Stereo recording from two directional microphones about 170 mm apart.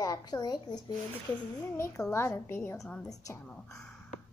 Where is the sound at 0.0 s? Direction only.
20° left (ahead or behind).